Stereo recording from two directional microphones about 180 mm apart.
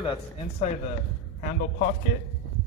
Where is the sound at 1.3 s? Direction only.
50° left (ahead or behind).